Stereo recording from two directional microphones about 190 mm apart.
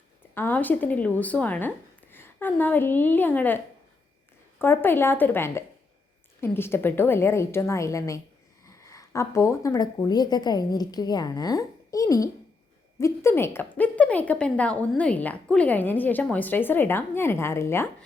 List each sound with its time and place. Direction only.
0.3 s a woman's voice: 10° left (ahead or behind)
4.6 s a woman's voice: 10° left (ahead or behind)